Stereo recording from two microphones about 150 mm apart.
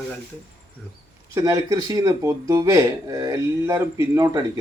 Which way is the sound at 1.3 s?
20° right (ahead or behind).